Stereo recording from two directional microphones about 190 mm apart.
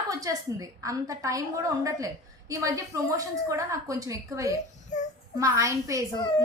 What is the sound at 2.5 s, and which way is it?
A woman's voice, 15° right (ahead or behind).